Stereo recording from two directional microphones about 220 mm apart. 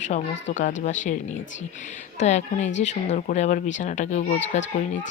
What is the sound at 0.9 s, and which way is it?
Speech, 35° left (ahead or behind).